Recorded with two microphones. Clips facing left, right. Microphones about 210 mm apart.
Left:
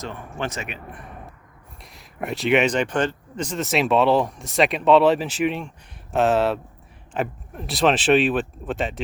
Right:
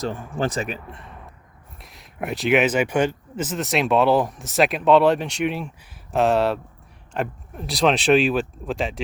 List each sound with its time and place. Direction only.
0.0 s speech: 35° right (ahead or behind)
1.8 s speech: centre (ahead or behind)